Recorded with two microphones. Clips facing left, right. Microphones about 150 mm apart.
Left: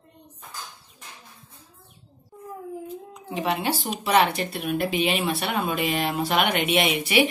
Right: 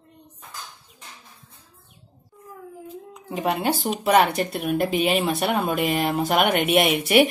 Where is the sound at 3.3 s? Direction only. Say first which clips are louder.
Right 2 dB; 45° right (ahead or behind).